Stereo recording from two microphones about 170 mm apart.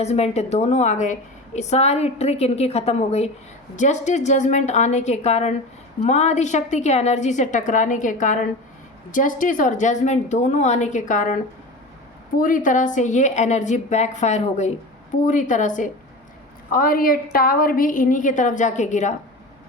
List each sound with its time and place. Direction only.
0.0 s a woman's voice: 40° left (ahead or behind)
12.4 s a woman's voice: 50° left (ahead or behind)
16.7 s a woman's voice: 60° left (ahead or behind)